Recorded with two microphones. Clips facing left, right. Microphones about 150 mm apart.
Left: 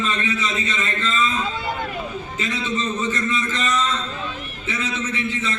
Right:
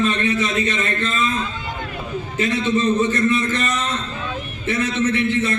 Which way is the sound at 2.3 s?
60° right (ahead or behind).